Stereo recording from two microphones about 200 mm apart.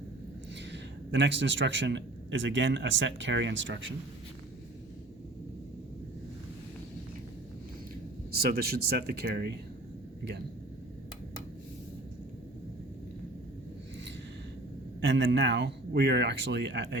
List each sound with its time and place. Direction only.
0.6 s a man's voice: 65° right (ahead or behind)
8.3 s speech: 50° right (ahead or behind)
15.0 s speech: 65° right (ahead or behind)